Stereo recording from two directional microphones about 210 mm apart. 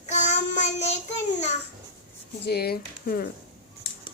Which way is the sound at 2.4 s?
50° left (ahead or behind).